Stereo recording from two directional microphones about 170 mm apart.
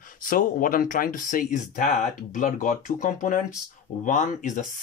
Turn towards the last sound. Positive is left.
turn(degrees=45)  # may be behind; listen again after turning